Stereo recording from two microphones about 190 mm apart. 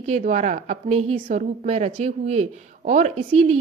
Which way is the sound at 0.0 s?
40° right (ahead or behind).